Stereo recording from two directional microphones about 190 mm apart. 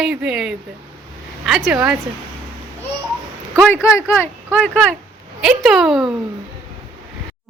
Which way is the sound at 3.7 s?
15° left (ahead or behind).